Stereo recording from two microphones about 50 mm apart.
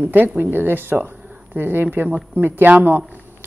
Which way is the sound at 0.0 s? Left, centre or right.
Right.